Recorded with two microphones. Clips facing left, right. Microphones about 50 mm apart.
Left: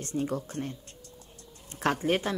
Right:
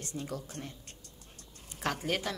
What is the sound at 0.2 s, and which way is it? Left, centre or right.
Speech, left.